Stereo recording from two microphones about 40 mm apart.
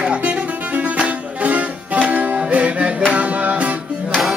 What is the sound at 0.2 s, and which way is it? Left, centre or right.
Music, right.